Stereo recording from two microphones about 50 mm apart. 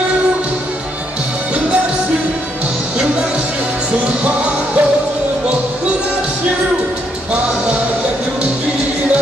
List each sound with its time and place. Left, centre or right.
4.2 s music: right